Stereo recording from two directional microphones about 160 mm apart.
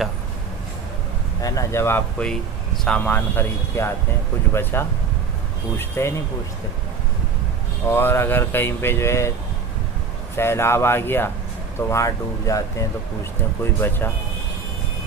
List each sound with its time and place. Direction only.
1.4 s speech: 20° left (ahead or behind)
7.9 s speech: 15° left (ahead or behind)
10.3 s speech: 15° left (ahead or behind)